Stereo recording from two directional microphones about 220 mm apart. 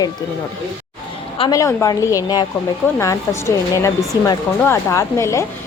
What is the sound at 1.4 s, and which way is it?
Speech, 15° left (ahead or behind).